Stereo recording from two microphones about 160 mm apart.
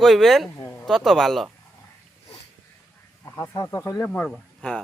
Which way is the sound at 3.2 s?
15° left (ahead or behind).